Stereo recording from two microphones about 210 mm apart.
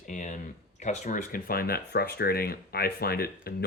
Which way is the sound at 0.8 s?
35° left (ahead or behind).